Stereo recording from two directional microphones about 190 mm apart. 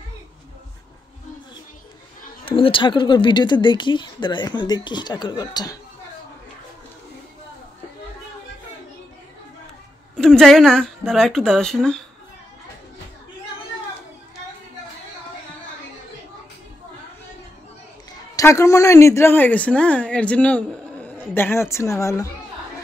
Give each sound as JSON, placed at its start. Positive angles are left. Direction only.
{"t": 2.4, "sound": "speech", "side_deg": 30}
{"t": 10.1, "sound": "speech", "side_deg": 5}
{"t": 18.3, "sound": "a woman's voice", "side_deg": 15}